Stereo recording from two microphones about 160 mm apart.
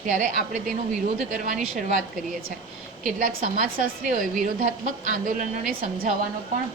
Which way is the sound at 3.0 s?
60° right (ahead or behind).